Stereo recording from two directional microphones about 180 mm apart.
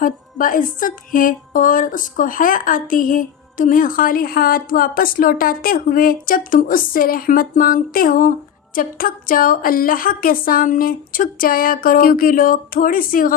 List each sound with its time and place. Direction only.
0.0 s speech: 50° left (ahead or behind)